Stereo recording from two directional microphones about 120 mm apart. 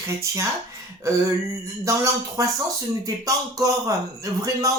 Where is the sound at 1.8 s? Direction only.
25° right (ahead or behind).